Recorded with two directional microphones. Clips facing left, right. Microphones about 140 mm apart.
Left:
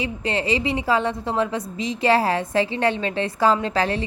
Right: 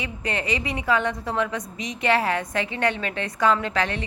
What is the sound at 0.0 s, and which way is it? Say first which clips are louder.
A woman's voice: left 4 dB; 30° left (ahead or behind).